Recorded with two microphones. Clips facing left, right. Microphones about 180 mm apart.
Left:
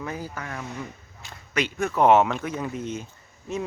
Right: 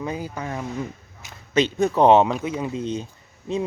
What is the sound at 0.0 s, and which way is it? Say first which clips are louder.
Speech: right 4 dB; 20° right (ahead or behind).